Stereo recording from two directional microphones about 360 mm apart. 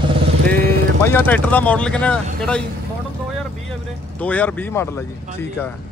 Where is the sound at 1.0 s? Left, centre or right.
Centre.